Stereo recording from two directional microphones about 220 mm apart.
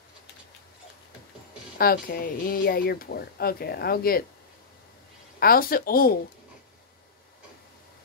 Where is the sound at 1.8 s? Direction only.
40° left (ahead or behind).